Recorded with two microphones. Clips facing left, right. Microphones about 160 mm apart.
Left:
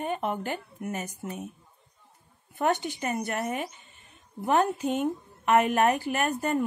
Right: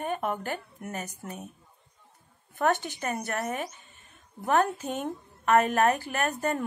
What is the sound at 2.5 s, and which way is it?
Speech, 15° left (ahead or behind).